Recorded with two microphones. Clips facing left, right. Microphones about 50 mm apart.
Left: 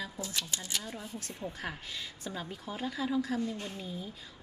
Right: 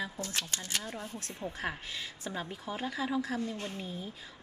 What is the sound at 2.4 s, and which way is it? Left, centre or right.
A woman's voice, right.